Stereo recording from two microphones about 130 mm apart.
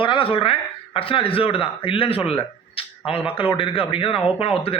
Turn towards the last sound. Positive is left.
turn(degrees=45)  # may be behind; listen again after turning